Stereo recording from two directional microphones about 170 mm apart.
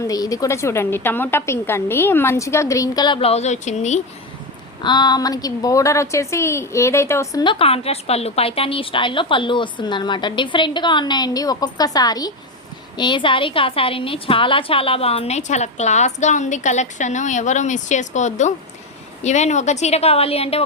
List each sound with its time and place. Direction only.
0.1 s a woman's voice: 20° left (ahead or behind); by 4.0 s 40° left (ahead or behind)
4.8 s a woman's voice: 25° left (ahead or behind)
7.4 s a woman's voice: 30° left (ahead or behind)